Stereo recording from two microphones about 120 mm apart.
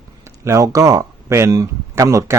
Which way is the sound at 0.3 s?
25° right (ahead or behind).